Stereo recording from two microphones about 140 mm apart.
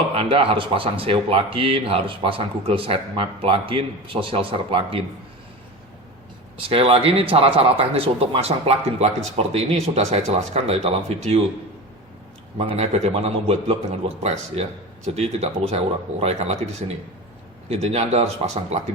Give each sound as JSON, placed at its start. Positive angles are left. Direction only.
{"t": 0.1, "sound": "speech", "side_deg": -45}
{"t": 6.6, "sound": "a man's voice", "side_deg": -45}
{"t": 12.5, "sound": "a man's voice", "side_deg": -50}